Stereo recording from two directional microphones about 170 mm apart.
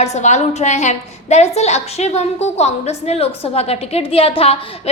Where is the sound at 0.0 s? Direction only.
40° left (ahead or behind).